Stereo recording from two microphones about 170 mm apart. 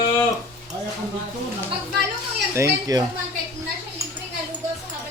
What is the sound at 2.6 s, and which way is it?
Speech, 20° right (ahead or behind).